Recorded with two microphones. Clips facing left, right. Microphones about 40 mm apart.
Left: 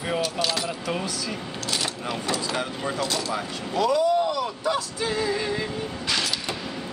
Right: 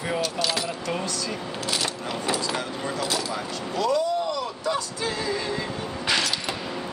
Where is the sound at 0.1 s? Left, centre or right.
Centre.